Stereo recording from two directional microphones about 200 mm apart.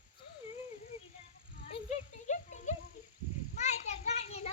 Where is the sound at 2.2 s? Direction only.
35° left (ahead or behind).